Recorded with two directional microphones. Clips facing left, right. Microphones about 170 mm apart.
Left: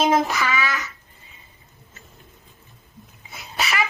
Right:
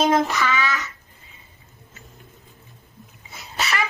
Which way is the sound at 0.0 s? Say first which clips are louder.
Even; 10° left (ahead or behind).